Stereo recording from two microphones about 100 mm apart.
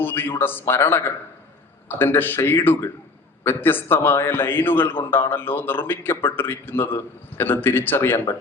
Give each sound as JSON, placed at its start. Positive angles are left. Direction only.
{"t": 0.0, "sound": "a man's voice", "side_deg": 20}